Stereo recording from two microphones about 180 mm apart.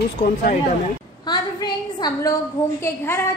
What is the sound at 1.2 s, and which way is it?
A woman's voice, 25° left (ahead or behind).